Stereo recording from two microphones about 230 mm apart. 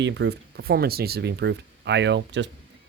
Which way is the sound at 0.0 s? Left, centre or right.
Right.